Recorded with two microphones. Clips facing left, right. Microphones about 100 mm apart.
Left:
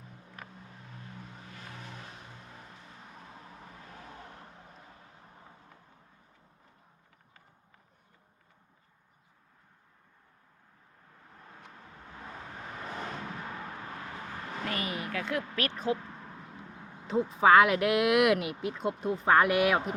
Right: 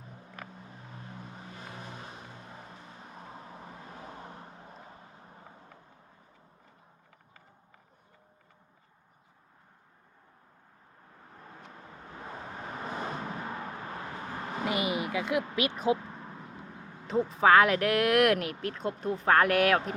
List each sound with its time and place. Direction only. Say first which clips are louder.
1.5 s vehicle: right 2 dB; 20° right (ahead or behind)
12.9 s vehicle: right 3 dB; 15° right (ahead or behind)
14.5 s vehicle: right 5 dB; 15° right (ahead or behind)
17.1 s speech: even; centre (ahead or behind)